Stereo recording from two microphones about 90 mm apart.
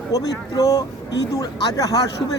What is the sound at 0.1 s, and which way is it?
Speech, 45° left (ahead or behind).